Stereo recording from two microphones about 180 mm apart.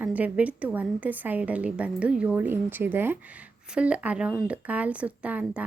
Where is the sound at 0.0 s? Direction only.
10° right (ahead or behind).